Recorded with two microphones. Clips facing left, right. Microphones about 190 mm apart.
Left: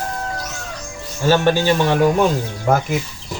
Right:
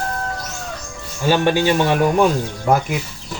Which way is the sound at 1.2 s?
15° right (ahead or behind).